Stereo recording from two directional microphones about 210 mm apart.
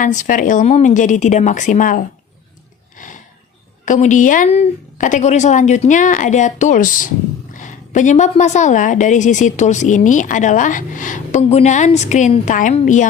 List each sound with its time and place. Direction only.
0.0 s a woman's voice: 35° left (ahead or behind)
3.8 s a woman's voice: 35° left (ahead or behind)